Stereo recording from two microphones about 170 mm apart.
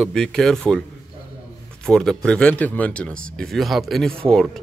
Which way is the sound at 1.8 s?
5° left (ahead or behind).